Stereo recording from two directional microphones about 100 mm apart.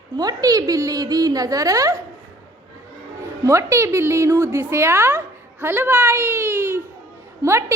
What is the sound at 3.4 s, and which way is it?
A woman's voice, 30° right (ahead or behind).